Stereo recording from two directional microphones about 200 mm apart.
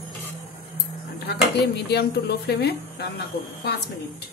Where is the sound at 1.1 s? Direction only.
55° left (ahead or behind).